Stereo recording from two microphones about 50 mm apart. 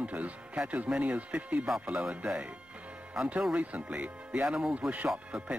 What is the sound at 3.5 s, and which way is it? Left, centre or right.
Speech, right.